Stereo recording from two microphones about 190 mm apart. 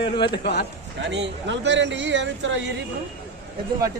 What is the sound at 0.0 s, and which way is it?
Speech, 25° left (ahead or behind).